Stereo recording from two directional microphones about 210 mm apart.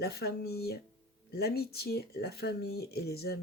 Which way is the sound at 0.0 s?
50° left (ahead or behind).